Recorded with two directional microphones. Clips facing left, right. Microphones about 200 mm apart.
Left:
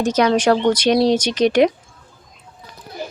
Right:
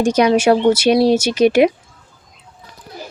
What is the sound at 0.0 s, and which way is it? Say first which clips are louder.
Speech: right 3 dB; 10° right (ahead or behind).